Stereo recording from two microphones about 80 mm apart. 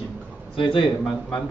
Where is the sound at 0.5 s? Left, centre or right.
Left.